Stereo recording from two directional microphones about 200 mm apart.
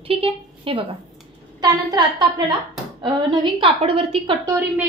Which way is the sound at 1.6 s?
20° right (ahead or behind).